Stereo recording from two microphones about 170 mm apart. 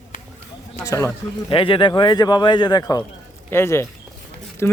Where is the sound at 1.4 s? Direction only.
30° left (ahead or behind).